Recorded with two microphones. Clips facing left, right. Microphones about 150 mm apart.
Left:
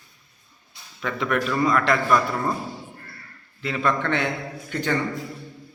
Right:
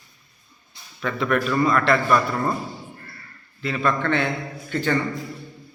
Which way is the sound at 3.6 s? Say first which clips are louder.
Right 1 dB; 20° left (ahead or behind).